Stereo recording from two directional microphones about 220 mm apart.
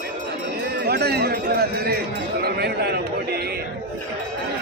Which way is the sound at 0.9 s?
45° right (ahead or behind).